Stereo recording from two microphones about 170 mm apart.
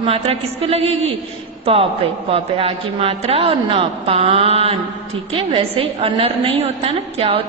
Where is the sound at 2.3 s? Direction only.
35° right (ahead or behind).